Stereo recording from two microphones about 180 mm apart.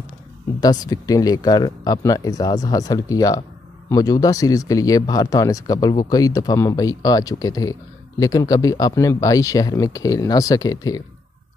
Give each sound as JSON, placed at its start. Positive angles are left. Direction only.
{"t": 0.6, "sound": "speech", "side_deg": 20}